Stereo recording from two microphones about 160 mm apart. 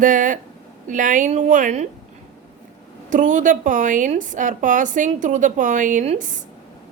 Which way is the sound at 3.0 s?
50° right (ahead or behind).